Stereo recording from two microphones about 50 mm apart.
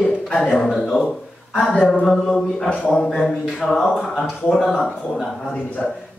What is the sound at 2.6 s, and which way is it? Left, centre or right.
Speech, left.